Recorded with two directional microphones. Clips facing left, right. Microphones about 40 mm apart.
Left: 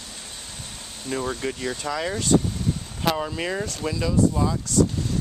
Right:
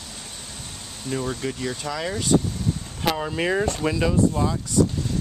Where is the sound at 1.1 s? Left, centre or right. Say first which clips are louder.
Even; centre; by 4.5 s right.